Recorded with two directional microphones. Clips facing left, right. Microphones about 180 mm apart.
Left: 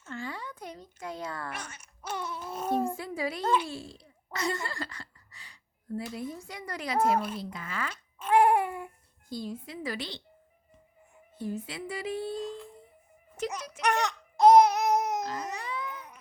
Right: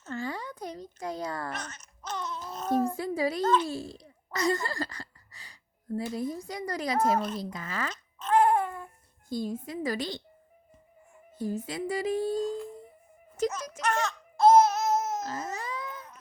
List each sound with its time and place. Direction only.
0.0 s a sound: 40° right (ahead or behind)
1.5 s babbling: 10° left (ahead or behind)
2.9 s a sound: 40° right (ahead or behind)
3.4 s a child's voice: 15° left (ahead or behind)
3.7 s speech: 40° right (ahead or behind)
8.2 s babbling: 15° left (ahead or behind)
9.3 s speech: 45° right (ahead or behind)
11.3 s speech: 40° right (ahead or behind)
13.8 s babbling: 15° left (ahead or behind)
15.5 s a sound: 40° right (ahead or behind)